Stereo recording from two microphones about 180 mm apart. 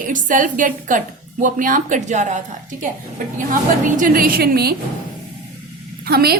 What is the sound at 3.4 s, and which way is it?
A woman's voice, 45° right (ahead or behind).